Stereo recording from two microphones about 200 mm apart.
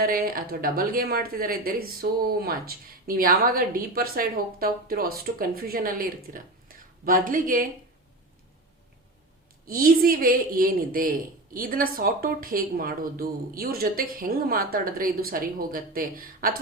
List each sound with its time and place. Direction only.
0.0 s speech: 45° right (ahead or behind)
9.6 s speech: 45° right (ahead or behind)